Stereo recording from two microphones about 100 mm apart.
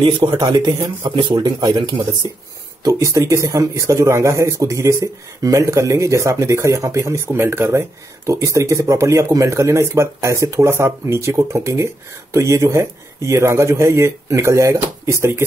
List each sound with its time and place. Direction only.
0.4 s speech: 45° right (ahead or behind); by 15.4 s 25° right (ahead or behind)